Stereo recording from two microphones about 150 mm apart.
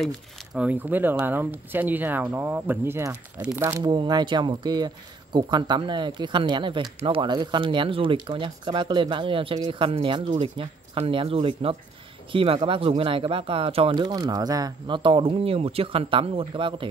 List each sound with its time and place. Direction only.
0.6 s speech: 10° right (ahead or behind)
3.8 s speech: 30° right (ahead or behind)